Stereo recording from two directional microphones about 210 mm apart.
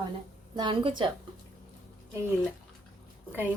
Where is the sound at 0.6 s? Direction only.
20° right (ahead or behind).